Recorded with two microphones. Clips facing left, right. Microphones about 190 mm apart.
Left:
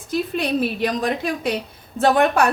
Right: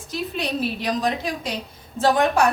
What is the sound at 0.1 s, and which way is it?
A woman's voice, 55° left (ahead or behind).